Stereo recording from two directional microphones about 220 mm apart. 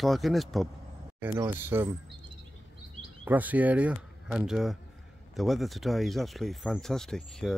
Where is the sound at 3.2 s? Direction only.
5° right (ahead or behind).